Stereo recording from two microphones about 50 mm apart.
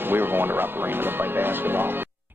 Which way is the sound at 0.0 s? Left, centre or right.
Right.